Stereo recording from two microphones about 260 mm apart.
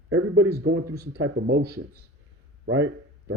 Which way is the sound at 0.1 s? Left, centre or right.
Right.